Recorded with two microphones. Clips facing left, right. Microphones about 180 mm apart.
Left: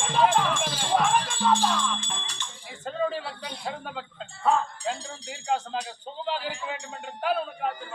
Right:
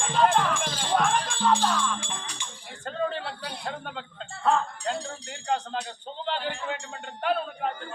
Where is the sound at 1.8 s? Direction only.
10° right (ahead or behind).